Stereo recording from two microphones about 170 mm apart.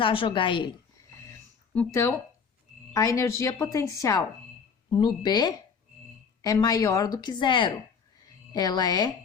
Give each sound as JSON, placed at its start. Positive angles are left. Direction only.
{"t": 0.0, "sound": "a woman's voice", "side_deg": 30}
{"t": 1.7, "sound": "a woman's voice", "side_deg": 15}